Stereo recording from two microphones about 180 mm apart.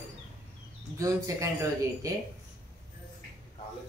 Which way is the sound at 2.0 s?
20° right (ahead or behind).